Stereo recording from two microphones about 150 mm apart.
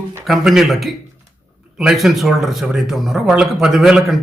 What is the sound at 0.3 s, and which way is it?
A man's voice, centre (ahead or behind).